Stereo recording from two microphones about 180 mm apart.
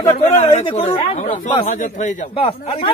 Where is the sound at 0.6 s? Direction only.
35° left (ahead or behind).